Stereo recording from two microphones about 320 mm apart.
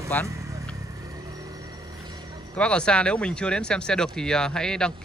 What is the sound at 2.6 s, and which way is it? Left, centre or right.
Speech, centre.